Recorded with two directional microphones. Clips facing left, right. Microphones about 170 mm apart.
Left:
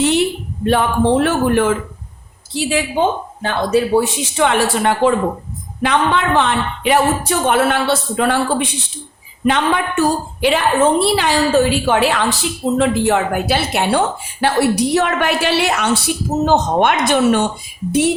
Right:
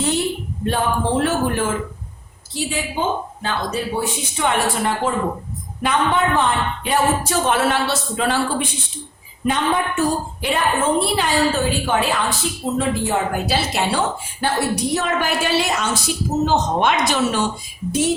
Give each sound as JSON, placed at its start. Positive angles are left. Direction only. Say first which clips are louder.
{"t": 0.0, "sound": "speech", "louder": "left 5 dB", "side_deg": 70}
{"t": 2.6, "sound": "a woman's voice", "louder": "left 7 dB", "side_deg": 75}
{"t": 9.5, "sound": "a woman's voice", "louder": "left 3 dB", "side_deg": 80}
{"t": 16.5, "sound": "speech", "louder": "left 6 dB", "side_deg": 55}